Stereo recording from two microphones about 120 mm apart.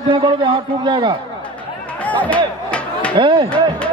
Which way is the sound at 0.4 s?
40° right (ahead or behind).